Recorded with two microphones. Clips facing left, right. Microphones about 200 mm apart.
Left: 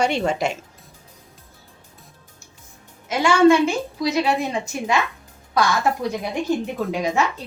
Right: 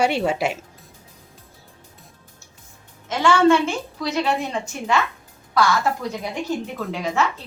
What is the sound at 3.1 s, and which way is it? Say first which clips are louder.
A woman's voice: left 2 dB; 10° left (ahead or behind).